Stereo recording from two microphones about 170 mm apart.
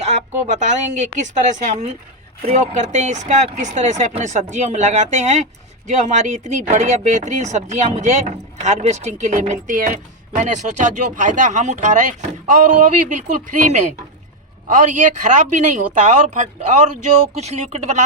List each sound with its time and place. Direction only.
0.4 s speech: 45° right (ahead or behind)